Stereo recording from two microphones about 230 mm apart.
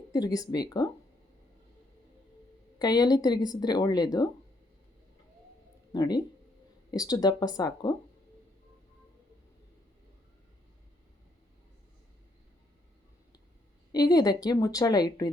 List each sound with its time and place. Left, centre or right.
0.1 s speech: centre
2.7 s speech: centre
5.9 s speech: centre
13.9 s speech: centre